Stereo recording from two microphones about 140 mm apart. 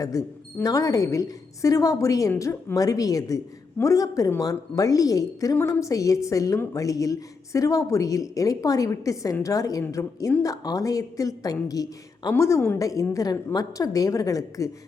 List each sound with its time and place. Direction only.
0.0 s a woman's voice: 25° left (ahead or behind)